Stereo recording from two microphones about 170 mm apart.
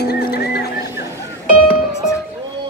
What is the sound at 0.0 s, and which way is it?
Music, 70° left (ahead or behind).